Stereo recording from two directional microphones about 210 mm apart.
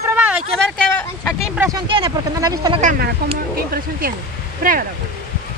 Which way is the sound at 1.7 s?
20° right (ahead or behind).